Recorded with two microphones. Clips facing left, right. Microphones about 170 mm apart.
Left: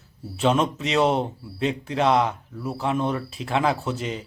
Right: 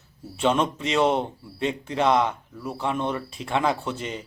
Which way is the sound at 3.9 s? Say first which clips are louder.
Left 3 dB; 30° left (ahead or behind).